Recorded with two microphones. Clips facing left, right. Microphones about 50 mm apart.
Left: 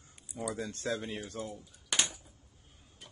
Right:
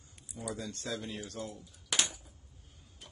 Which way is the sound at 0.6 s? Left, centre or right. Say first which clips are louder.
Left 4 dB; left.